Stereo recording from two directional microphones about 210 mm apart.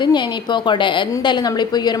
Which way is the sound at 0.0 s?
20° left (ahead or behind).